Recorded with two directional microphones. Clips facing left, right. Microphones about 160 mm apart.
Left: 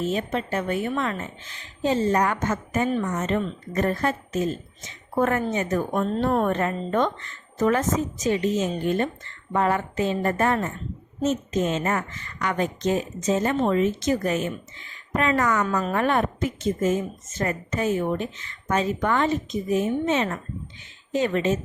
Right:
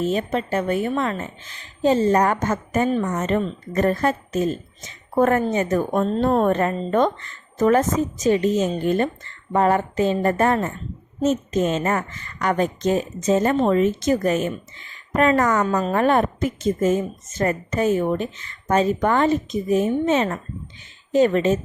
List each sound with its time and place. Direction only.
0.1 s a woman's voice: 40° right (ahead or behind)